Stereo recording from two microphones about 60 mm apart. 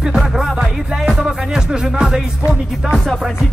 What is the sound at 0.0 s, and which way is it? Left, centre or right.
Music, centre.